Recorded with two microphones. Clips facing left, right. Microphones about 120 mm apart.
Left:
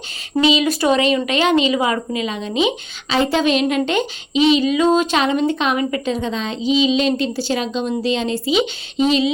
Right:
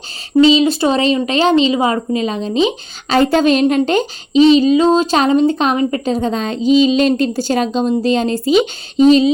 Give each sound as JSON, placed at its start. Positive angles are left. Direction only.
{"t": 0.4, "sound": "speech", "side_deg": -30}